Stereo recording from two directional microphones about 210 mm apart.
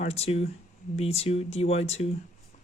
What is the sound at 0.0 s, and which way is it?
Speech, 30° left (ahead or behind).